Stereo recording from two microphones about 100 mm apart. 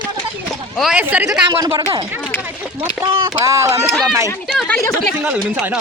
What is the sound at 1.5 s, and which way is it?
Speech, 45° right (ahead or behind).